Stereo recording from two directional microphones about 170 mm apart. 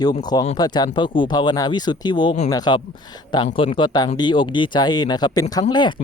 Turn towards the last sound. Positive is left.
turn(degrees=25)  # may be behind; listen again after turning